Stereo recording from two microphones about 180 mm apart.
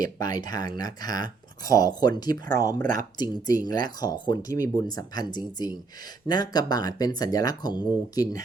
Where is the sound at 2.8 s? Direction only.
50° right (ahead or behind).